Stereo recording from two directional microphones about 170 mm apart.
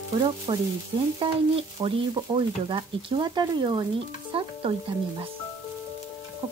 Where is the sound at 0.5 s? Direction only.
30° right (ahead or behind).